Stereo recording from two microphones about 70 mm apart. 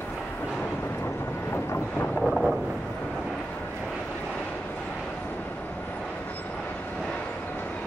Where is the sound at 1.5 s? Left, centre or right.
Left.